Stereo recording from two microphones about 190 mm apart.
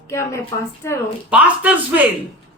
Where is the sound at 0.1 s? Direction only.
15° left (ahead or behind).